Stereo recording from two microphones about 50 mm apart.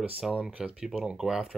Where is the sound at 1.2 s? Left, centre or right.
Centre.